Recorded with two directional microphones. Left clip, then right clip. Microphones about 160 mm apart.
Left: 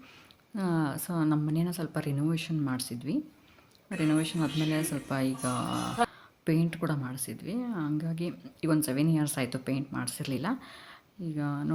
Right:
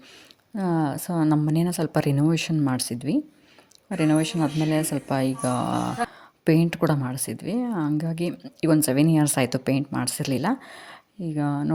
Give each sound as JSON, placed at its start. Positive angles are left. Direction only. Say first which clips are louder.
{"t": 0.5, "sound": "a woman's voice", "louder": "right 6 dB", "side_deg": -25}
{"t": 4.4, "sound": "speech", "louder": "right 6 dB", "side_deg": -25}
{"t": 6.4, "sound": "a woman's voice", "louder": "right 9 dB", "side_deg": -45}